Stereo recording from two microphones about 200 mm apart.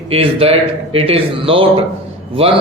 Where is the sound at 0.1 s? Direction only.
30° right (ahead or behind).